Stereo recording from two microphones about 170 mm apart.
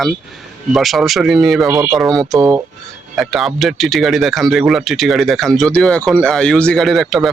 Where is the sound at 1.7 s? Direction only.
20° right (ahead or behind).